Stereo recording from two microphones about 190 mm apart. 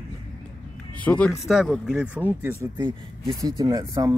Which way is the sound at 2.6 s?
20° right (ahead or behind).